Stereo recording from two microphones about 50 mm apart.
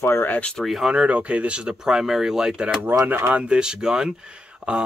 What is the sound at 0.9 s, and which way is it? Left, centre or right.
Speech, right.